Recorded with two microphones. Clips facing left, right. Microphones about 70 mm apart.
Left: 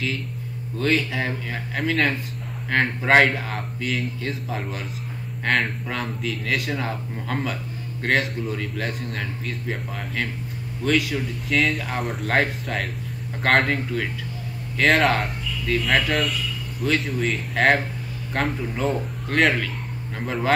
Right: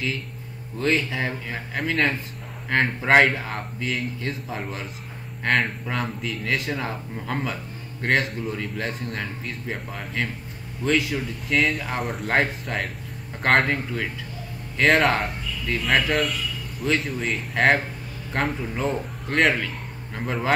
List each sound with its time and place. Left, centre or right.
0.7 s a man's voice: centre
10.8 s speech: centre
11.4 s a man's voice: centre